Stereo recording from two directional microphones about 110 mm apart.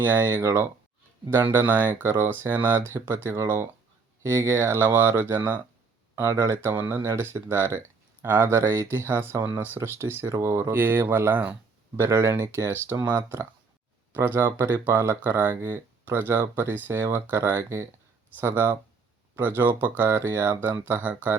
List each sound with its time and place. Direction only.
0.0 s speech: 25° right (ahead or behind)